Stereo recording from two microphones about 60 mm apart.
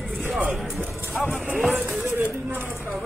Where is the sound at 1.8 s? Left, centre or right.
Right.